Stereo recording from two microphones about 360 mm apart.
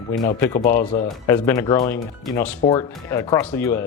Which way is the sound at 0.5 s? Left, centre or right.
Left.